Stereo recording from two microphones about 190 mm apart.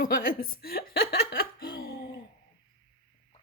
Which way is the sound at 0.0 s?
50° left (ahead or behind).